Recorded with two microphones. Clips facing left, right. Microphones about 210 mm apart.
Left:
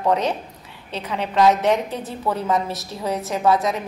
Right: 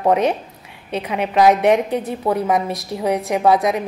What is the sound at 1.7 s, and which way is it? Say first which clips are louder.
Speech: right 5 dB; 65° right (ahead or behind).